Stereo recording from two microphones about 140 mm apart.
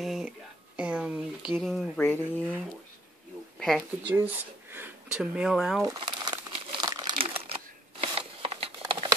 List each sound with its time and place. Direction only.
0.0 s a sound: centre (ahead or behind)
0.7 s speech: 10° right (ahead or behind)
2.0 s speech: 15° left (ahead or behind)
3.5 s a sound: centre (ahead or behind)
4.1 s speech: 15° right (ahead or behind)
5.9 s crumpling: 35° right (ahead or behind)
7.2 s shuffling cards: 45° right (ahead or behind)